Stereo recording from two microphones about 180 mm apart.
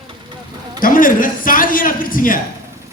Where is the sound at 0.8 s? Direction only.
50° left (ahead or behind).